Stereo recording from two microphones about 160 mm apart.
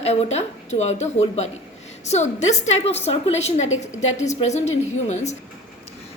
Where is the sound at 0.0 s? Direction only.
40° left (ahead or behind).